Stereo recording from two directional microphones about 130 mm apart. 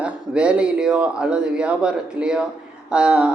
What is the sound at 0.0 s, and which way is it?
Speech, 10° right (ahead or behind).